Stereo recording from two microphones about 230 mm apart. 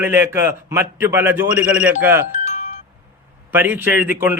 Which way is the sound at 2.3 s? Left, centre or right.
Left.